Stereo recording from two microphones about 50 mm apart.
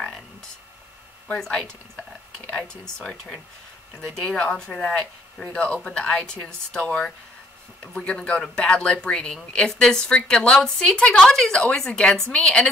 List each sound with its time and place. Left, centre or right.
1.4 s speech: centre
6.4 s speech: centre